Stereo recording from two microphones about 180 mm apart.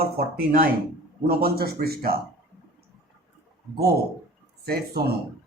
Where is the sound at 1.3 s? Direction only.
55° right (ahead or behind).